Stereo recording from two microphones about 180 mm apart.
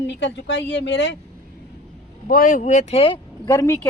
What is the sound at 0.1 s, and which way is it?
Speech, 80° left.